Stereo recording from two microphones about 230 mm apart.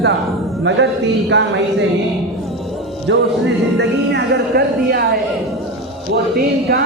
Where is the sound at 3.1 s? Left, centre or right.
Right.